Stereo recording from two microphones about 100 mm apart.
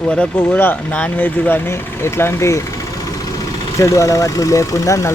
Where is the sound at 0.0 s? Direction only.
10° left (ahead or behind).